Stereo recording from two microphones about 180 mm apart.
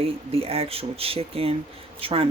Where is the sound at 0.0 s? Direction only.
30° right (ahead or behind).